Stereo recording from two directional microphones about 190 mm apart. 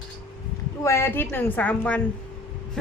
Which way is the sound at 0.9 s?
15° left (ahead or behind).